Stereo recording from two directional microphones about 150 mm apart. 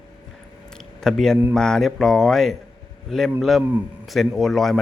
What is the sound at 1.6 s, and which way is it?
Speech, 5° left (ahead or behind).